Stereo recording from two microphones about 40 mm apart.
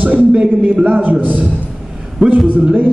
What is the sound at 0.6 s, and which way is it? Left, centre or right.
A man's voice, right.